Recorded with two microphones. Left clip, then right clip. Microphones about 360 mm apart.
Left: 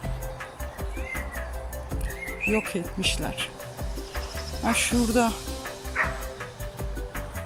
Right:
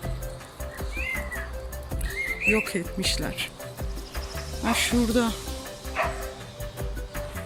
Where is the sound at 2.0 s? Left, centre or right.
Centre.